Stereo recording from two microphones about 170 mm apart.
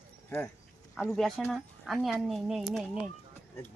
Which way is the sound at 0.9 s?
Centre (ahead or behind).